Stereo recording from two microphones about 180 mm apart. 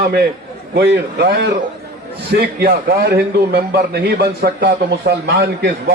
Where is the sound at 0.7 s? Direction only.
65° right (ahead or behind).